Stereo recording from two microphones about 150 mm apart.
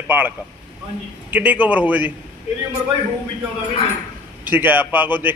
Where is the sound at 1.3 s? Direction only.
10° right (ahead or behind).